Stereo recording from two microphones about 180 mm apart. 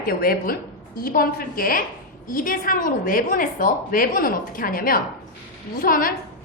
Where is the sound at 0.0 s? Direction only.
55° left (ahead or behind).